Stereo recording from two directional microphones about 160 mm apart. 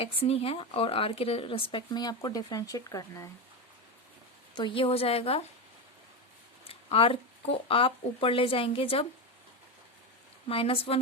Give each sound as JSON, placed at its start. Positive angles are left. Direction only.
{"t": 0.0, "sound": "speech", "side_deg": 40}
{"t": 4.5, "sound": "speech", "side_deg": 30}
{"t": 6.7, "sound": "speech", "side_deg": 35}
{"t": 10.5, "sound": "speech", "side_deg": 35}